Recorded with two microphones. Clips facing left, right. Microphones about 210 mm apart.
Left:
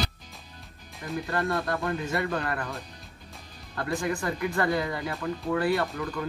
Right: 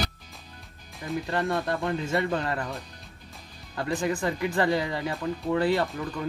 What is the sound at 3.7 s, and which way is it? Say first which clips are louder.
Speech: right 2 dB; 20° right (ahead or behind).